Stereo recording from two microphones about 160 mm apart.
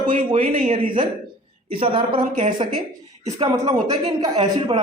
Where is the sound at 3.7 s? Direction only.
25° right (ahead or behind).